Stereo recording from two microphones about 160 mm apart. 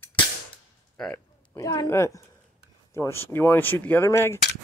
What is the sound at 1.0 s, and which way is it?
Speech, 5° left (ahead or behind).